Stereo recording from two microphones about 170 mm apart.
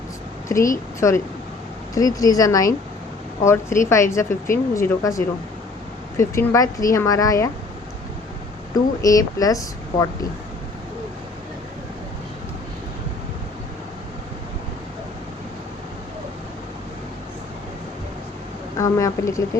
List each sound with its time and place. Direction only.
0.4 s a woman's voice: 15° left (ahead or behind)
8.7 s speech: 20° left (ahead or behind)
18.8 s speech: 20° left (ahead or behind)